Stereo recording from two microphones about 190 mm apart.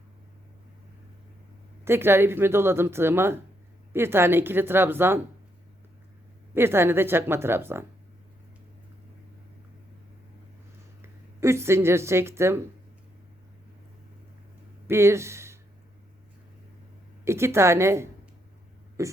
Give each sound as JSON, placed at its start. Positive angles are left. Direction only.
{"t": 1.8, "sound": "speech", "side_deg": -10}
{"t": 6.5, "sound": "speech", "side_deg": -10}
{"t": 11.0, "sound": "speech", "side_deg": -15}
{"t": 14.8, "sound": "speech", "side_deg": -15}
{"t": 17.2, "sound": "speech", "side_deg": -15}